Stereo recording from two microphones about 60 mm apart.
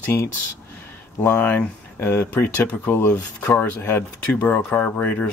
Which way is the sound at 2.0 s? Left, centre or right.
Left.